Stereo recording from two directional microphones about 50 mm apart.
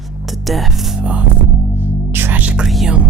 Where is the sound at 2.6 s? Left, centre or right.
Centre.